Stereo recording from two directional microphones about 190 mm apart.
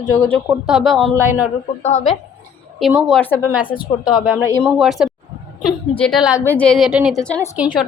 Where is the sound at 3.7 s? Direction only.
25° left (ahead or behind).